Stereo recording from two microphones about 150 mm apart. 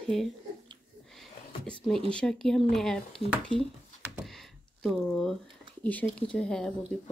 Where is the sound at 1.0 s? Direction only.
5° left (ahead or behind).